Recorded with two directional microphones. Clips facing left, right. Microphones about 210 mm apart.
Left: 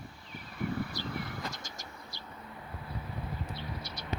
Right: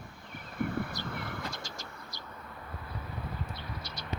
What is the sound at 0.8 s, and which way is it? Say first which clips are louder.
Vehicle: even; 55° right (ahead or behind).